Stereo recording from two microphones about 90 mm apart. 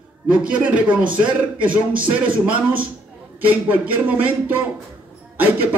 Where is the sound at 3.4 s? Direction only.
20° right (ahead or behind).